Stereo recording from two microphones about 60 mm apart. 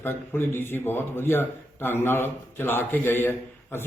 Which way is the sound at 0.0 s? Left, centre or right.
Left.